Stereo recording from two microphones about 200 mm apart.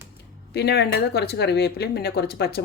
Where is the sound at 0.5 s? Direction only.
55° left (ahead or behind).